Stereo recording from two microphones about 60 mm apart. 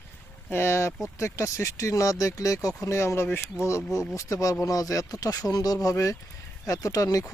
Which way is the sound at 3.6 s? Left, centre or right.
Left.